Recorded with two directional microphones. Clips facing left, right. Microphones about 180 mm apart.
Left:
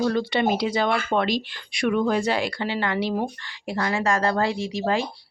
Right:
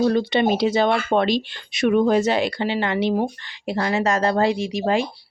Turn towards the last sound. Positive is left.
turn(degrees=-15)  # may be behind; listen again after turning